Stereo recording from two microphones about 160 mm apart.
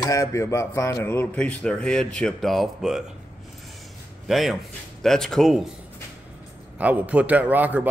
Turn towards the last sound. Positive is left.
turn(degrees=-10)  # may be behind; listen again after turning